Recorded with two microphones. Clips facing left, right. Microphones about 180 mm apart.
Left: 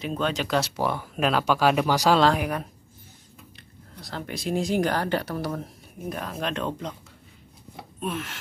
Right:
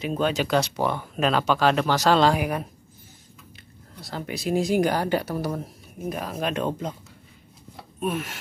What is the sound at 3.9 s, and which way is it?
Speech, 5° right (ahead or behind).